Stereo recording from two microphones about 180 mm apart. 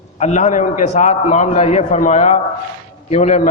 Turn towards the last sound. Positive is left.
turn(degrees=40)  # may be behind; listen again after turning